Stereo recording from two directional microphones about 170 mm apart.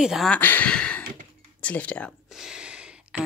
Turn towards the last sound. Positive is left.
turn(degrees=-5)  # may be behind; listen again after turning